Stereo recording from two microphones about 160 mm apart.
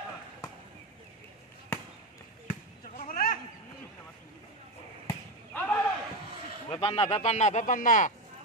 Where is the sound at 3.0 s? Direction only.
60° left (ahead or behind).